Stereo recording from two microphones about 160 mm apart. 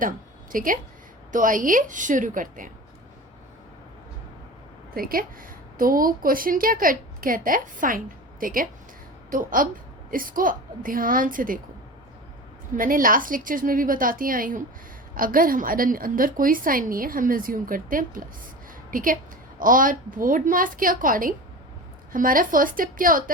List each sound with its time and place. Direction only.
0.5 s a woman's voice: 60° right (ahead or behind)
4.9 s a woman's voice: 65° right (ahead or behind)
12.7 s a woman's voice: 60° right (ahead or behind)